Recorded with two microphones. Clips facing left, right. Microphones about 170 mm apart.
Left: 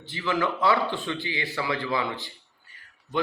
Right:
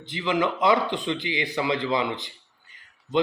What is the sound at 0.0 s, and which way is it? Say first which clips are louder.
A man's voice: right 2 dB; 20° right (ahead or behind).